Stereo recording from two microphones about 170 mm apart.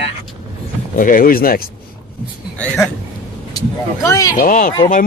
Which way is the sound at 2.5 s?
5° left (ahead or behind).